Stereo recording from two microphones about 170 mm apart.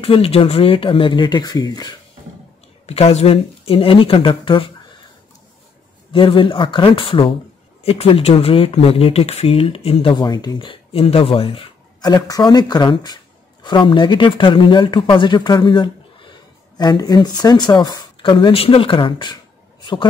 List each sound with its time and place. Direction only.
0.0 s speech: 35° left (ahead or behind)
2.9 s speech: 40° left (ahead or behind)
6.1 s speech: 30° left (ahead or behind)
10.1 s speech: 25° left (ahead or behind)
19.8 s a sound: 25° left (ahead or behind)